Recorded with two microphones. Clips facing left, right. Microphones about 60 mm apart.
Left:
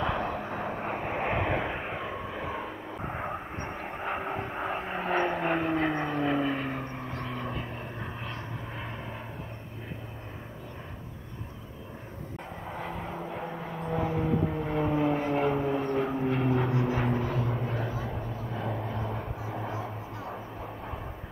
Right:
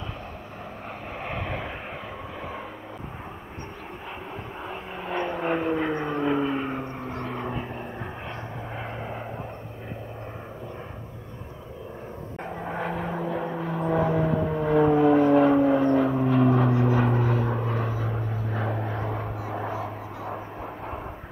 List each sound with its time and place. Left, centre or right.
0.2 s vehicle: left
0.8 s vehicle: left; by 2.7 s centre
4.0 s vehicle: left; by 6.9 s centre
7.1 s vehicle: right
12.6 s vehicle: right
15.5 s gong: right
16.9 s vehicle: right
17.4 s vehicle: right